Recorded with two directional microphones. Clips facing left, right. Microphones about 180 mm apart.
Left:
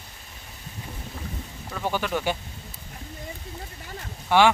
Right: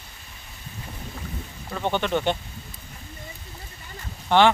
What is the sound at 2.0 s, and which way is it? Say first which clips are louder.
Speech: right 3 dB; 5° left (ahead or behind).